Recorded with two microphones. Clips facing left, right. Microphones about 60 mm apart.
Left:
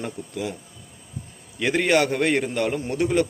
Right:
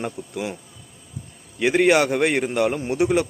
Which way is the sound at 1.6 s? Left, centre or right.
Centre.